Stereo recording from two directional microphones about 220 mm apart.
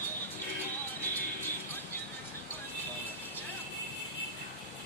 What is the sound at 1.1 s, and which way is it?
Music, 10° left (ahead or behind).